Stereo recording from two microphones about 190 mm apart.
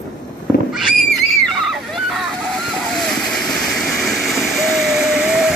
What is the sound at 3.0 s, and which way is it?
Waterfall, centre (ahead or behind).